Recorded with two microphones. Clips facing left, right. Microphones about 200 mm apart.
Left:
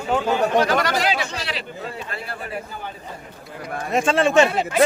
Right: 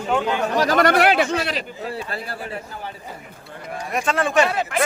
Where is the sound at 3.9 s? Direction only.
25° left (ahead or behind).